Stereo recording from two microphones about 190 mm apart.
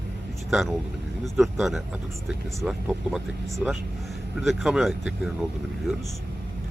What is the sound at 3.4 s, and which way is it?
Speech, 15° right (ahead or behind).